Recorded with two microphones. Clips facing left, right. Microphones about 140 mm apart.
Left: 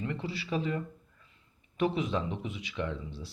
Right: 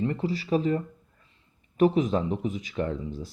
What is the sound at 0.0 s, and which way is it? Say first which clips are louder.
Speech: right 8 dB; 40° right (ahead or behind).